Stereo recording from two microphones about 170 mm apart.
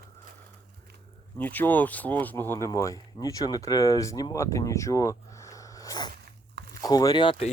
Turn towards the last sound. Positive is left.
turn(degrees=35)  # may be behind; listen again after turning